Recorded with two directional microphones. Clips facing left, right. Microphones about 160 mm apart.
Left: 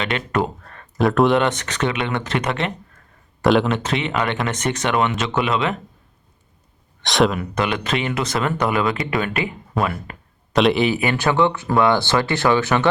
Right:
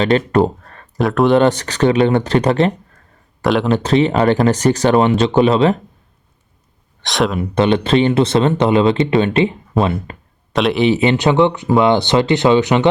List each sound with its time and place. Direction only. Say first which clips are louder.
0.0 s speech: right 8 dB; 35° right (ahead or behind)
0.9 s speech: right 3 dB; centre (ahead or behind)
1.4 s speech: right 7 dB; 35° right (ahead or behind)
3.4 s speech: even; centre (ahead or behind)
3.7 s speech: right 8 dB; 35° right (ahead or behind)
7.0 s speech: even; centre (ahead or behind)
7.5 s speech: right 9 dB; 30° right (ahead or behind)
10.5 s speech: right 1 dB; centre (ahead or behind)
10.8 s speech: right 6 dB; 25° right (ahead or behind)